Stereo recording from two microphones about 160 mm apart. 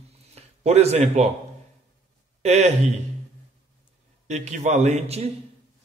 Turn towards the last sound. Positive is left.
turn(degrees=-45)  # may be behind; listen again after turning